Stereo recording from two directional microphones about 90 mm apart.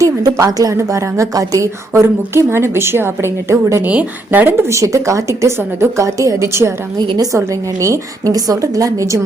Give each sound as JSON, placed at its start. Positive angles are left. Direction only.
{"t": 0.0, "sound": "a woman's voice", "side_deg": -40}
{"t": 3.8, "sound": "a woman's voice", "side_deg": -15}
{"t": 4.7, "sound": "a woman's voice", "side_deg": -35}